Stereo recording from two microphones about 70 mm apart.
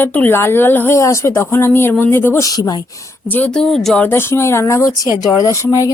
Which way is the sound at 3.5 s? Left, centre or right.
Centre.